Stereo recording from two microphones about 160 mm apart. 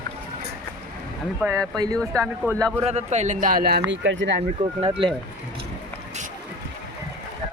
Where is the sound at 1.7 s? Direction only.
25° right (ahead or behind).